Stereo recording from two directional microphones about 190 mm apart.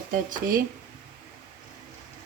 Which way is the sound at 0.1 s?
45° right (ahead or behind).